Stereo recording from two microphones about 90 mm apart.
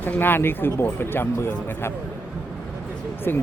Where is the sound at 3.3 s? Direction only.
25° left (ahead or behind).